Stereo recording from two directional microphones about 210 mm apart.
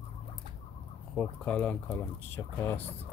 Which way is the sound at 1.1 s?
5° left (ahead or behind).